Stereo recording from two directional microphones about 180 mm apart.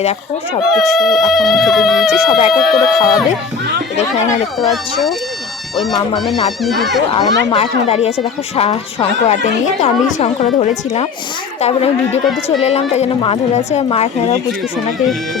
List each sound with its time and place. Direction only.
0.7 s speech: centre (ahead or behind)
3.9 s speech: 40° left (ahead or behind)
4.6 s speech: centre (ahead or behind)
6.1 s speech: centre (ahead or behind)
7.1 s speech: 30° left (ahead or behind)